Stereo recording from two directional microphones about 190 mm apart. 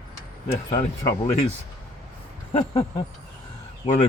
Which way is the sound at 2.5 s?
30° left (ahead or behind).